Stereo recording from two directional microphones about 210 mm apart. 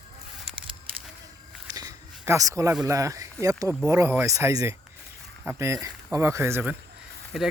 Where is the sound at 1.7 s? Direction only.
15° right (ahead or behind).